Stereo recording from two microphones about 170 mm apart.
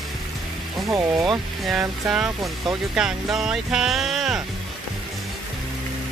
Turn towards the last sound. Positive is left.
turn(degrees=0)  # may be behind; listen again after turning